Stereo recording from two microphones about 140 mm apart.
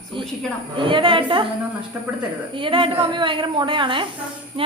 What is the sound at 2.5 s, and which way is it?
Speech, 40° right (ahead or behind).